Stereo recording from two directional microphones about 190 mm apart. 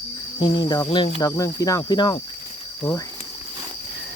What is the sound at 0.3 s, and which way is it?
Speech, 25° left (ahead or behind).